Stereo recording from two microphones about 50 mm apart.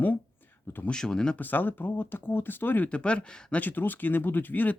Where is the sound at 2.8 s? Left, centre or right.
Left.